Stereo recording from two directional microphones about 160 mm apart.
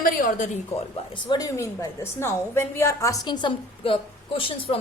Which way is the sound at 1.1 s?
25° left (ahead or behind).